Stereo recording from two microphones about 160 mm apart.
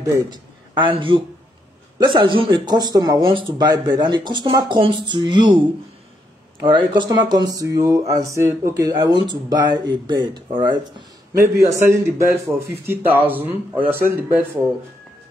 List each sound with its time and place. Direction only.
0.0 s a man's voice: 30° right (ahead or behind)
6.9 s speech: 25° right (ahead or behind)
11.3 s a man's voice: 15° right (ahead or behind)